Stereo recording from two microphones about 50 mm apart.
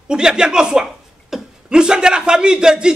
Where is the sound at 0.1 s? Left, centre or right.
Centre.